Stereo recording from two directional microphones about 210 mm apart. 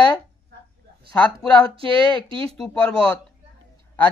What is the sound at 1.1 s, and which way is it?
Speech, 5° left (ahead or behind).